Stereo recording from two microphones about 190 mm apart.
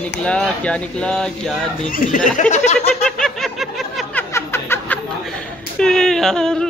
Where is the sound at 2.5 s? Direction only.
35° left (ahead or behind).